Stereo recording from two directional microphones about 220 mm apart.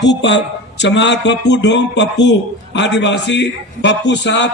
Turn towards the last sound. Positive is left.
turn(degrees=55)  # may be behind; listen again after turning